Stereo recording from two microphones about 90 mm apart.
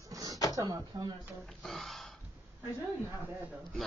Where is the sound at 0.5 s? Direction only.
40° right (ahead or behind).